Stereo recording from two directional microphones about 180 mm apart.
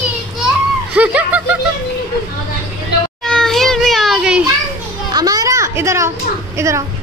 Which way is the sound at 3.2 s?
5° left (ahead or behind).